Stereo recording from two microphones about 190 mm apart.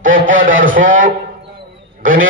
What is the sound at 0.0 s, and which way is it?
A man's voice, 45° right (ahead or behind).